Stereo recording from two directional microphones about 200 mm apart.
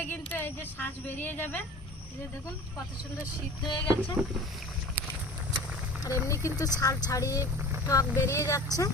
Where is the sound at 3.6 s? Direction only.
20° left (ahead or behind).